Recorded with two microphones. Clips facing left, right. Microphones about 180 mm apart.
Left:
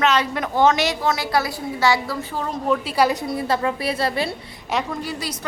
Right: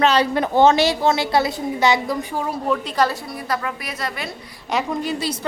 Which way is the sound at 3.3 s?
25° left (ahead or behind).